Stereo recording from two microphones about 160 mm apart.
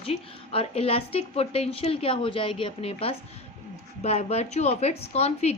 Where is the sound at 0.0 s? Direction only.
35° left (ahead or behind).